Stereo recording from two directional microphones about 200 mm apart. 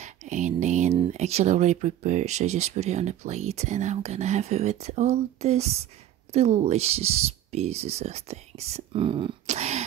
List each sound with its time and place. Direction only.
0.0 s speech: 35° right (ahead or behind)